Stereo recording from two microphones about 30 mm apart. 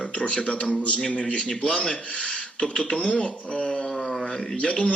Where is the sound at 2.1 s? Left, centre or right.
Left.